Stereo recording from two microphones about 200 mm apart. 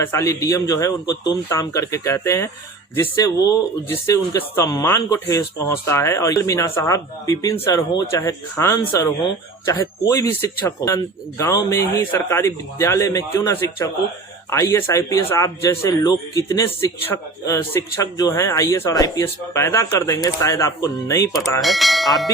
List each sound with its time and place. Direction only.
0.0 s speech: 15° left (ahead or behind)
21.6 s speech: centre (ahead or behind)